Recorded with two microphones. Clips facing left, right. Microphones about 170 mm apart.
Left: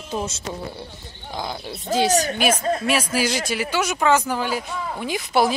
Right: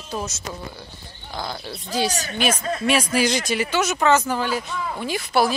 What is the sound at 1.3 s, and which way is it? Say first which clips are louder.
Speech: left 1 dB; 15° left (ahead or behind).